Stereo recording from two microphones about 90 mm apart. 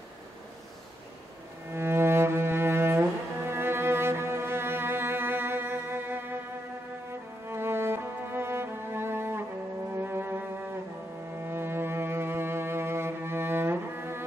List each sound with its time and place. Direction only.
1.7 s cello: 25° right (ahead or behind)
7.4 s music: 25° right (ahead or behind)
11.3 s cello: 25° right (ahead or behind)